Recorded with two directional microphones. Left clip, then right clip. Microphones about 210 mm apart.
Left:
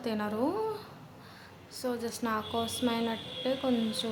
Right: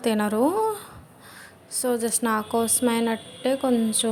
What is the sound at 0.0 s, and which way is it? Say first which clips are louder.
A woman's voice: right 10 dB; 35° right (ahead or behind).